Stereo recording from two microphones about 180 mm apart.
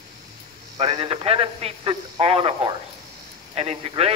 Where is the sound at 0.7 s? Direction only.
35° right (ahead or behind).